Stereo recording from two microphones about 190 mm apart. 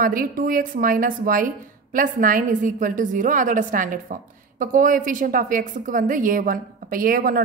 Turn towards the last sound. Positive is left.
turn(degrees=-45)  # may be behind; listen again after turning